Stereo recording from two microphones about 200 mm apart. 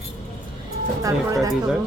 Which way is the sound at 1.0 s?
15° right (ahead or behind).